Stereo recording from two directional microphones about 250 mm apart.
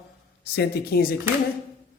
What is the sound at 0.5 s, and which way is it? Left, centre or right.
Speech, left.